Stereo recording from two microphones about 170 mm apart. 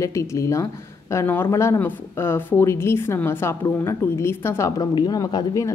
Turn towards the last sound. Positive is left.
turn(degrees=20)  # may be behind; listen again after turning